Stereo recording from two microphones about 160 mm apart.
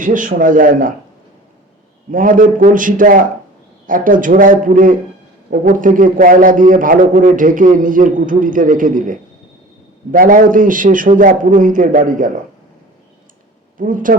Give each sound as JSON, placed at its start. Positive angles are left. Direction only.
{"t": 0.0, "sound": "a man's voice", "side_deg": -55}
{"t": 2.0, "sound": "a man's voice", "side_deg": -55}
{"t": 13.7, "sound": "a man's voice", "side_deg": -55}